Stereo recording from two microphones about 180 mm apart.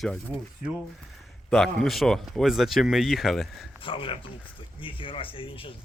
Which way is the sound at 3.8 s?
30° left (ahead or behind).